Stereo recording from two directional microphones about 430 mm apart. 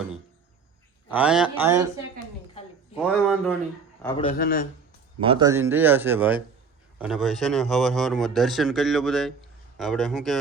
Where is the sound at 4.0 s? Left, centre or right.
Centre.